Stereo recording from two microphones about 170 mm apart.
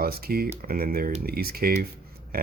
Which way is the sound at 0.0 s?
65° right (ahead or behind).